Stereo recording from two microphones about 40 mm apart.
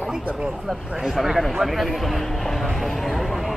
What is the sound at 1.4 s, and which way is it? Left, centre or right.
Speech, centre.